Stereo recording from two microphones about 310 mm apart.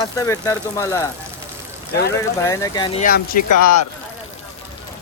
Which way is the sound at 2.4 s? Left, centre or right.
Centre.